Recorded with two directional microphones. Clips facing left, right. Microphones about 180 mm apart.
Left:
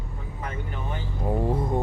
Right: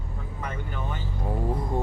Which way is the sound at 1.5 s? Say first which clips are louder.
Left 3 dB; 20° left (ahead or behind).